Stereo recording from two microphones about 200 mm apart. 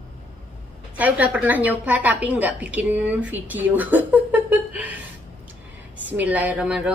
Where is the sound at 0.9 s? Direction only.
10° right (ahead or behind).